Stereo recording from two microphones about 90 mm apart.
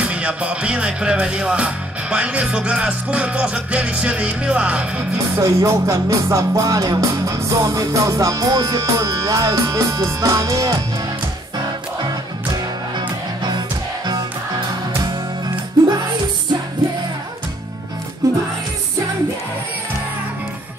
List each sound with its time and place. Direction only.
0.0 s music: 15° right (ahead or behind)
5.3 s music: 35° right (ahead or behind)
12.9 s music: 55° right (ahead or behind)
18.2 s music: 40° right (ahead or behind)